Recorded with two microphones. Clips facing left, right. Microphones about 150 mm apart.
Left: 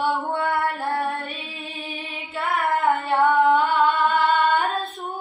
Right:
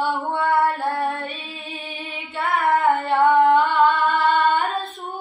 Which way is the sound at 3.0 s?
Centre (ahead or behind).